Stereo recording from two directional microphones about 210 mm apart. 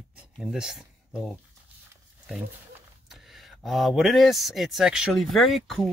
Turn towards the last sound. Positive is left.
turn(degrees=0)  # may be behind; listen again after turning